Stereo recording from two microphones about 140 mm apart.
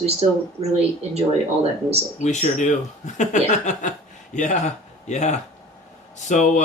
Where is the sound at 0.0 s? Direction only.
50° right (ahead or behind).